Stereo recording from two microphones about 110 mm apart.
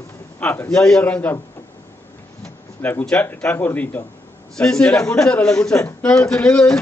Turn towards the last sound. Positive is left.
turn(degrees=10)  # may be behind; listen again after turning